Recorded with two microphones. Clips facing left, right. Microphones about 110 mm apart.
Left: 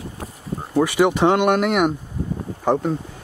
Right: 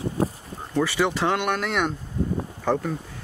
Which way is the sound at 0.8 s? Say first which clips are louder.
Left 6 dB; 15° left (ahead or behind).